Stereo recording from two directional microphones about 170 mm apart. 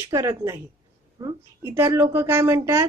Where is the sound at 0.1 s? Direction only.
15° right (ahead or behind).